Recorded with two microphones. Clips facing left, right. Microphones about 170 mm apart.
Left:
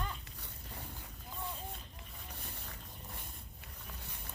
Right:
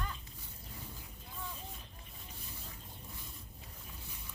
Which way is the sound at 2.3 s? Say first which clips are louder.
Left 2 dB; 65° left (ahead or behind).